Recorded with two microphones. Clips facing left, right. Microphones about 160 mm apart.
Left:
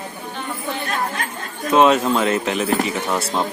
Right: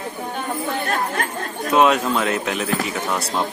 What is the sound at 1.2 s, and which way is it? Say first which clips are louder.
Speech: right 2 dB; 55° right (ahead or behind).